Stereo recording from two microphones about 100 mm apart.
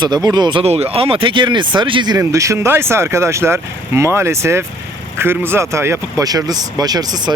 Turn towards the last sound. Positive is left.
turn(degrees=-40)  # may be behind; listen again after turning